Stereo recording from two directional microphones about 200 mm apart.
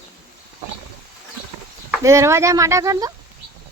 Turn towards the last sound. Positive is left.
turn(degrees=-15)  # may be behind; listen again after turning